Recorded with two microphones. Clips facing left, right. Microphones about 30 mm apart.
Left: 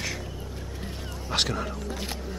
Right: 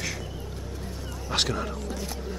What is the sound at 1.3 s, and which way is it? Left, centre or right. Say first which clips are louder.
Speech: even; centre.